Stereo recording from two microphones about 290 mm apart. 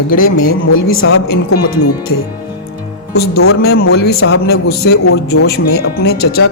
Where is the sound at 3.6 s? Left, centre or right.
Left.